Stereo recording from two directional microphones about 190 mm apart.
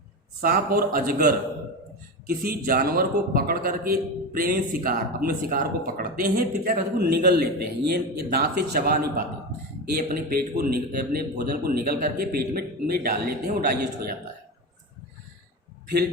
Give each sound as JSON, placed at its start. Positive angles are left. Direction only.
{"t": 0.4, "sound": "a man's voice", "side_deg": -50}